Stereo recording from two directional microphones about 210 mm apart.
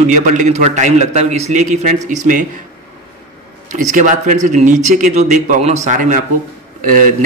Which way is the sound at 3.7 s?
35° right (ahead or behind).